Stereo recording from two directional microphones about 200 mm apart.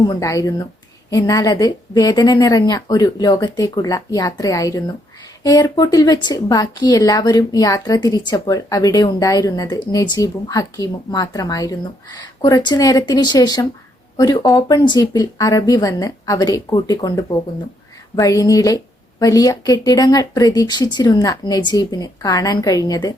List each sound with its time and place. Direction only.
0.0 s a woman's voice: 20° left (ahead or behind)